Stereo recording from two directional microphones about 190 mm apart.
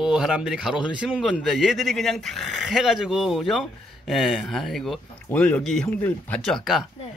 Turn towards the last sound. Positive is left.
turn(degrees=0)  # may be behind; listen again after turning